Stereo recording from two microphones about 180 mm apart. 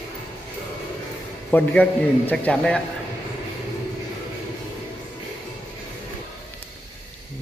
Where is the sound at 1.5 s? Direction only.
10° left (ahead or behind).